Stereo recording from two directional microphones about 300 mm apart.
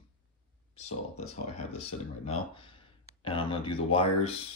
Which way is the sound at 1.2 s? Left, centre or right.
Centre.